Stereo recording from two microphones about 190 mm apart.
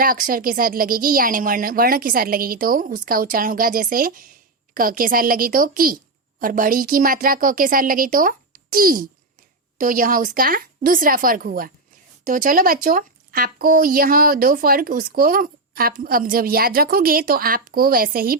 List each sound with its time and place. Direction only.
0.0 s speech: 45° right (ahead or behind)